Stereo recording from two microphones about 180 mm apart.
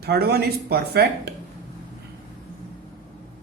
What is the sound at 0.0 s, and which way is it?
Speech, 60° right (ahead or behind).